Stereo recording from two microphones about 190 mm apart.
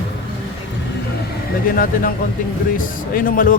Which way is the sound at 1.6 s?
50° left (ahead or behind).